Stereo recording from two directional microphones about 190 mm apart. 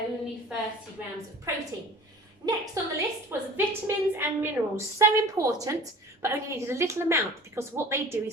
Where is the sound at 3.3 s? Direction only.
10° right (ahead or behind).